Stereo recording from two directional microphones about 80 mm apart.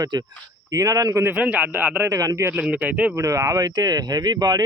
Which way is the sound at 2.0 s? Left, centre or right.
Right.